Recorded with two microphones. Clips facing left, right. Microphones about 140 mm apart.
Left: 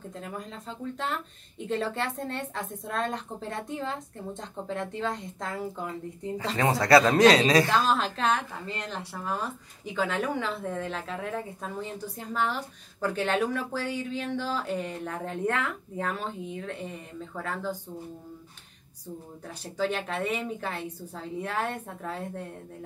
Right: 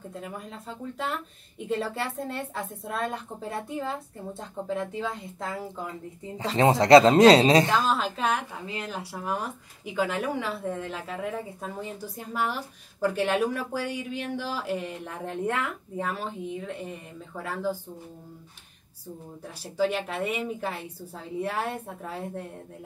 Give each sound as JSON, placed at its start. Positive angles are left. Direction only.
{"t": 0.1, "sound": "a woman's voice", "side_deg": -5}
{"t": 6.5, "sound": "speech", "side_deg": -25}
{"t": 7.7, "sound": "a woman's voice", "side_deg": 0}
{"t": 19.4, "sound": "speech", "side_deg": -5}